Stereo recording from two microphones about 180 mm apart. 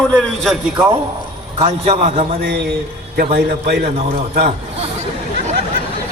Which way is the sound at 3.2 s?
60° right (ahead or behind).